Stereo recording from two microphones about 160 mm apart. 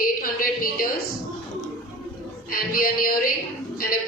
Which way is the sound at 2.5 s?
60° left (ahead or behind).